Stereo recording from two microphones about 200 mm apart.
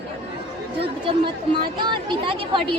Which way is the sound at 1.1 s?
25° right (ahead or behind).